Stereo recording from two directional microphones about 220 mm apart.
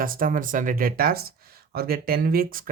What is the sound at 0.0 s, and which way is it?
Speech, 40° right (ahead or behind).